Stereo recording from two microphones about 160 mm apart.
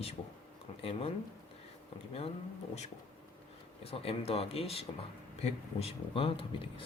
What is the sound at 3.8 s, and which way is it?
Speech, 40° left (ahead or behind).